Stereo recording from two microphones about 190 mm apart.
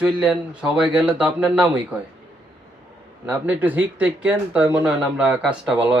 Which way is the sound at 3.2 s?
10° right (ahead or behind).